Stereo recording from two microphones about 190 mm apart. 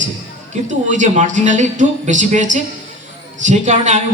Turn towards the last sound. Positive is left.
turn(degrees=-40)  # may be behind; listen again after turning